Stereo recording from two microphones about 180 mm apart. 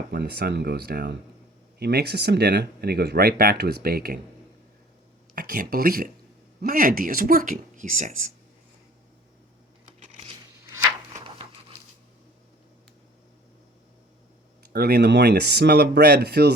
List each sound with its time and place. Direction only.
0.1 s speech: 60° right (ahead or behind)
5.3 s speech: 55° right (ahead or behind)
10.0 s a sound: 35° right (ahead or behind)
14.6 s speech: 60° right (ahead or behind)